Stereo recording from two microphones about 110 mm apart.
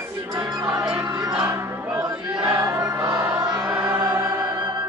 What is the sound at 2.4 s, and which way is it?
Choir, 25° right (ahead or behind).